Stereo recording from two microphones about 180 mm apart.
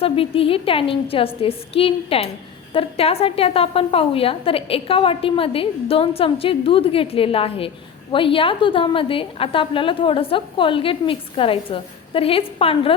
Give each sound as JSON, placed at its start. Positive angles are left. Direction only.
{"t": 0.0, "sound": "a woman's voice", "side_deg": 30}